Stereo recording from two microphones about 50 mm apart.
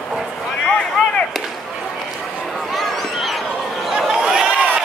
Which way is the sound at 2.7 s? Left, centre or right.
Centre.